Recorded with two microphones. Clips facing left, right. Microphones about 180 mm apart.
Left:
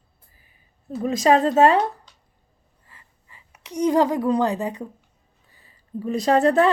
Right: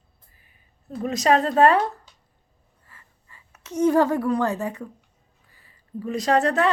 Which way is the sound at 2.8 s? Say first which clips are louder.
Even; 15° left (ahead or behind).